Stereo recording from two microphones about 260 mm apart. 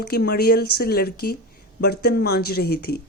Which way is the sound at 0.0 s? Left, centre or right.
Left.